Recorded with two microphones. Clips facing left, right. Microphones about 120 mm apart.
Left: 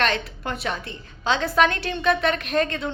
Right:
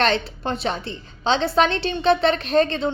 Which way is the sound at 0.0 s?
30° right (ahead or behind).